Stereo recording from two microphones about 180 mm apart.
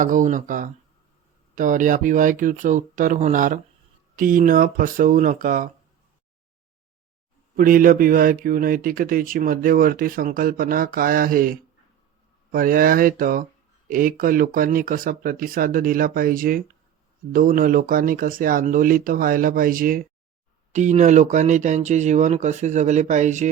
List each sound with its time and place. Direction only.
0.0 s speech: 45° right (ahead or behind)
7.5 s speech: 50° right (ahead or behind)